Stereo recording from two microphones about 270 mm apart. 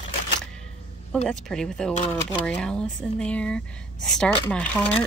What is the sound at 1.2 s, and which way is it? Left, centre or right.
Speech, centre.